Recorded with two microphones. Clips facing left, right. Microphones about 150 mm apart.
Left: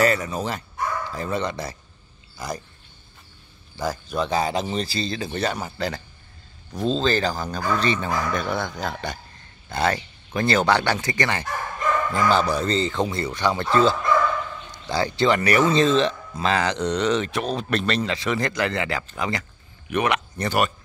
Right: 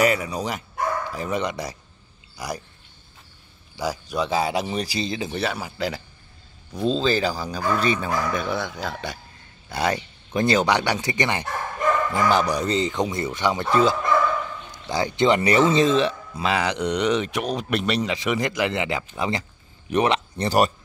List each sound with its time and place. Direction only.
0.0 s speech: 10° right (ahead or behind)
3.7 s speech: 10° right (ahead or behind)
5.4 s speech: 5° right (ahead or behind)
9.7 s speech: 10° right (ahead or behind); by 20.7 s 35° right (ahead or behind)